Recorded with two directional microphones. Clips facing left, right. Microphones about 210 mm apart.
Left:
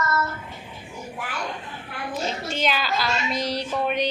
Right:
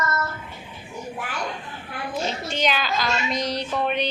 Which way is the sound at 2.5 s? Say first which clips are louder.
Right 1 dB; 5° left (ahead or behind).